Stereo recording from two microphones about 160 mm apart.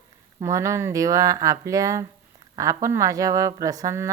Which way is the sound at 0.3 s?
20° right (ahead or behind).